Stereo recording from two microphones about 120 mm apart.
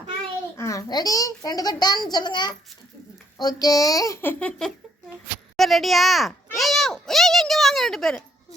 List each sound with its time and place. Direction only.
0.5 s a child's voice: 25° left (ahead or behind); by 8.1 s 5° left (ahead or behind)